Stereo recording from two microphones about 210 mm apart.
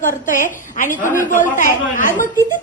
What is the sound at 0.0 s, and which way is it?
A woman's voice, 40° left (ahead or behind).